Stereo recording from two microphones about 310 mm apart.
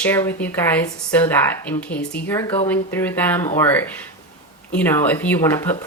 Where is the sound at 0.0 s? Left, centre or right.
Centre.